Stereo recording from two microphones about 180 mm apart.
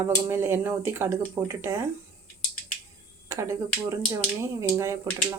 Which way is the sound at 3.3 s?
15° right (ahead or behind).